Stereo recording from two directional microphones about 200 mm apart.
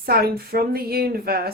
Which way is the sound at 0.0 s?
50° right (ahead or behind).